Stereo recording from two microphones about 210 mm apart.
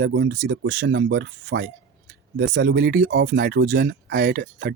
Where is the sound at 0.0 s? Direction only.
55° right (ahead or behind).